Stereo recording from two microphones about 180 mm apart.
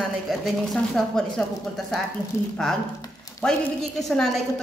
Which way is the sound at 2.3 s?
15° left (ahead or behind).